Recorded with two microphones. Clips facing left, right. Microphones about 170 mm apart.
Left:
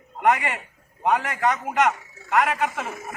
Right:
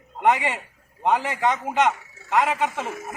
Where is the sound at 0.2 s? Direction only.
20° right (ahead or behind).